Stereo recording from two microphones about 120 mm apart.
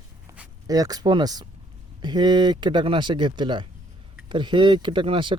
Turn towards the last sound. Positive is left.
turn(degrees=-45)  # may be behind; listen again after turning